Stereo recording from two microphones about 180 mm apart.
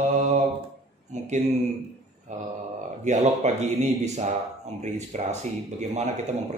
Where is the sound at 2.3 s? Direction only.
40° right (ahead or behind).